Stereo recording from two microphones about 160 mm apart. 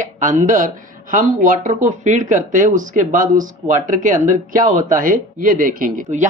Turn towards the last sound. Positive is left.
turn(degrees=-60)  # may be behind; listen again after turning